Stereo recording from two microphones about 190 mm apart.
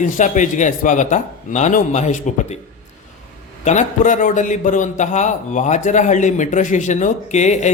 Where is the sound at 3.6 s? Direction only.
40° left (ahead or behind).